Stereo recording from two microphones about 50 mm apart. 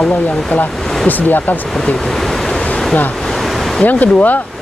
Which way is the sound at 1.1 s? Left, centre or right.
Left.